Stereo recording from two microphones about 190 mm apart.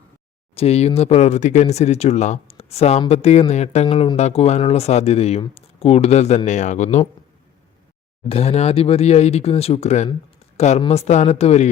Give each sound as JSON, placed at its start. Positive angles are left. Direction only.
{"t": 0.5, "sound": "speech", "side_deg": 30}
{"t": 8.3, "sound": "speech", "side_deg": 35}